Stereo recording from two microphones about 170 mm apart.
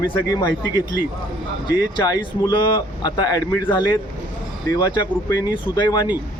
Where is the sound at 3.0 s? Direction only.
25° left (ahead or behind).